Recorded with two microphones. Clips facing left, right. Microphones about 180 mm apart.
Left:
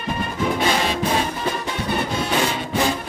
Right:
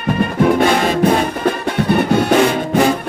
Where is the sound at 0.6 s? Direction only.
55° right (ahead or behind).